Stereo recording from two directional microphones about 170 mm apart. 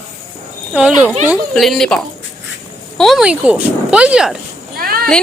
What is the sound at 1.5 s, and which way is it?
Speech, centre (ahead or behind).